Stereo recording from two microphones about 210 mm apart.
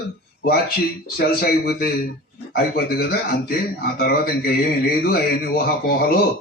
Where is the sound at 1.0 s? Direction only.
45° left (ahead or behind).